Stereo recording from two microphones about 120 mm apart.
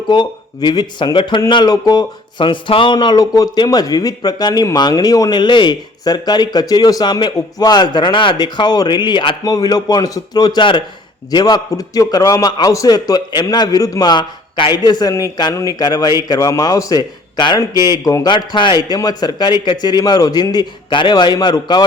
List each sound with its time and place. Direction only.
0.1 s speech: 40° left (ahead or behind)